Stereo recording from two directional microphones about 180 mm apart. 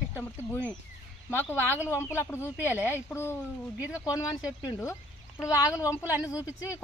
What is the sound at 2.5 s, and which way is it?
Speech, 10° right (ahead or behind).